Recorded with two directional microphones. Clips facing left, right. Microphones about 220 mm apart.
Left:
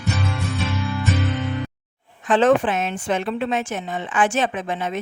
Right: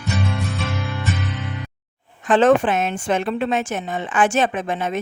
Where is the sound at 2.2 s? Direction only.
45° right (ahead or behind).